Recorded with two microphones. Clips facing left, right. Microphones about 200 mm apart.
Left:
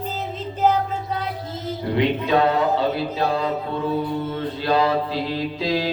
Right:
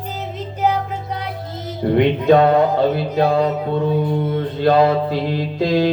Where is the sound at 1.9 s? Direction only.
50° right (ahead or behind).